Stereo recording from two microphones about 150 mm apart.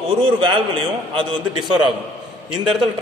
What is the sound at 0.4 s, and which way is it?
A man's voice, 35° right (ahead or behind).